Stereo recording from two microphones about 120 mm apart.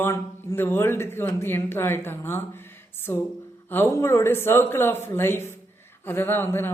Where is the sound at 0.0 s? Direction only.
20° left (ahead or behind).